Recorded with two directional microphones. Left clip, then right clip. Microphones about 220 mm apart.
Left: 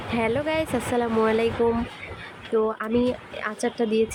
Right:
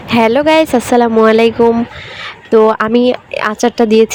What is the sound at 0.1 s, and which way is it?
Speech, 35° right (ahead or behind).